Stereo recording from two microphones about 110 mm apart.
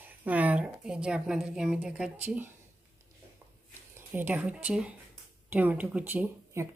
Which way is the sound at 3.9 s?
15° right (ahead or behind).